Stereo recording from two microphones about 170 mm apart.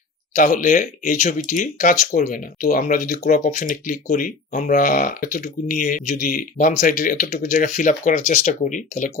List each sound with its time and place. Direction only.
0.3 s speech: 50° left (ahead or behind)